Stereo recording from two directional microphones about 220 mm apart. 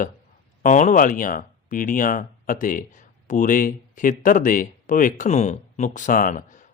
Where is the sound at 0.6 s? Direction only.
35° left (ahead or behind).